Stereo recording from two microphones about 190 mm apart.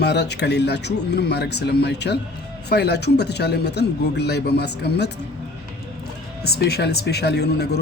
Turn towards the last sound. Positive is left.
turn(degrees=60)  # may be behind; listen again after turning